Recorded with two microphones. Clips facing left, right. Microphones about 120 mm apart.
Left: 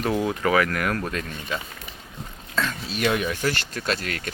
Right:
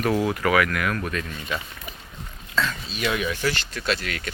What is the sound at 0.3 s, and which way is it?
Speech, 30° left (ahead or behind).